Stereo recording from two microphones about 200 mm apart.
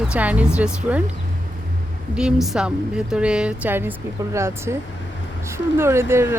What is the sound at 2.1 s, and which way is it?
A woman's voice, 5° right (ahead or behind).